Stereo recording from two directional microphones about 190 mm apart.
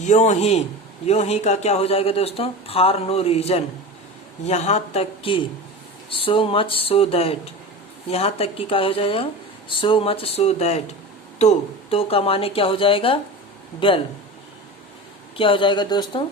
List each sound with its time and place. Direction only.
0.0 s speech: 40° left (ahead or behind)
15.4 s speech: 25° left (ahead or behind)